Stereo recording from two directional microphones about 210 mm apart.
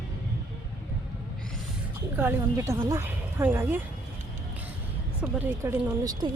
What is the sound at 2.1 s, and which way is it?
Speech, 10° right (ahead or behind).